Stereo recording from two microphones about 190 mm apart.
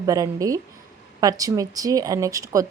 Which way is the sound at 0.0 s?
20° right (ahead or behind).